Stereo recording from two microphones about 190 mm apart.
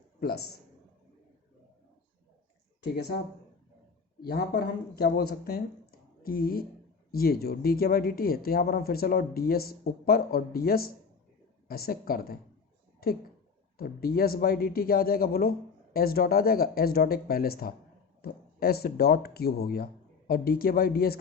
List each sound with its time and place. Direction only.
0.2 s a man's voice: 55° left (ahead or behind)
4.2 s speech: 55° left (ahead or behind)
13.7 s speech: 55° left (ahead or behind)